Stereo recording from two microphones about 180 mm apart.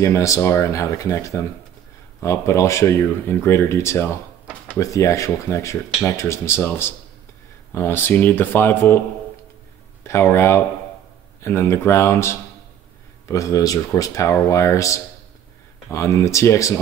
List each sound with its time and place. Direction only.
0.0 s speech: 15° left (ahead or behind)
10.0 s speech: 15° left (ahead or behind)